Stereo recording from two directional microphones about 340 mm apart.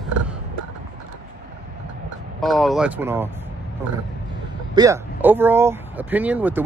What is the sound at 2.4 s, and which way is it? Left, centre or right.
Speech, centre.